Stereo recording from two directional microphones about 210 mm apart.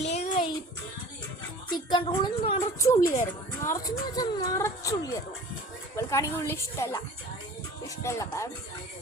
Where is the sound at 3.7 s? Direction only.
15° left (ahead or behind).